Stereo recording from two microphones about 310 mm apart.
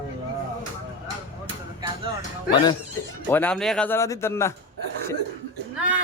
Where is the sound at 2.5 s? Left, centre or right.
Centre.